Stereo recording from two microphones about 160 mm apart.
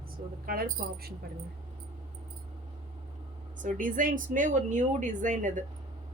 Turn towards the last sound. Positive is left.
turn(degrees=-55)  # may be behind; listen again after turning